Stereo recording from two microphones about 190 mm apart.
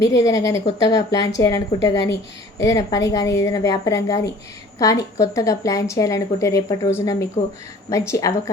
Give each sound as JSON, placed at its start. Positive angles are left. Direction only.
{"t": 0.0, "sound": "a woman's voice", "side_deg": 15}